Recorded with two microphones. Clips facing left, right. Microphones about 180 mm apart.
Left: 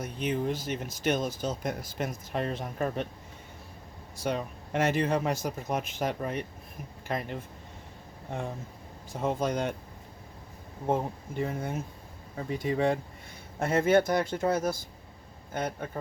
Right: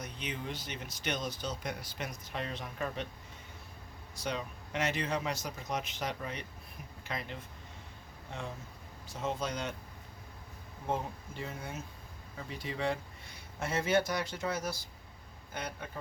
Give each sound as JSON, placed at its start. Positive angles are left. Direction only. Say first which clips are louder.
{"t": 0.0, "sound": "speech", "louder": "left 10 dB", "side_deg": 50}
{"t": 4.2, "sound": "speech", "louder": "left 6 dB", "side_deg": 50}
{"t": 9.1, "sound": "speech", "louder": "left 7 dB", "side_deg": 55}
{"t": 11.3, "sound": "speech", "louder": "left 10 dB", "side_deg": 55}